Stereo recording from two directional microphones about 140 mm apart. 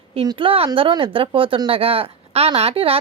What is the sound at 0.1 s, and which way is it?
Speech, 40° right (ahead or behind).